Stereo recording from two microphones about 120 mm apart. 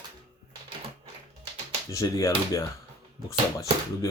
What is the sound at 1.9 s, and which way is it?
Speech, 25° left (ahead or behind).